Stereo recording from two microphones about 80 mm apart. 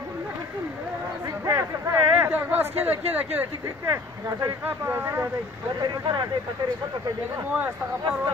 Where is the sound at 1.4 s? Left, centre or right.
Right.